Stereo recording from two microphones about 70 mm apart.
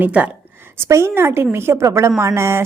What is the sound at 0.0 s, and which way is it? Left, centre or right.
Speech, right.